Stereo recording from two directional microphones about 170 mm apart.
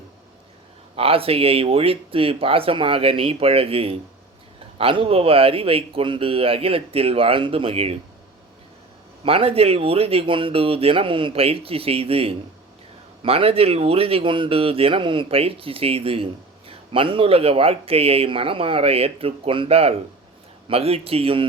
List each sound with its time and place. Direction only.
0.9 s speech: 35° right (ahead or behind)
9.2 s speech: 35° right (ahead or behind)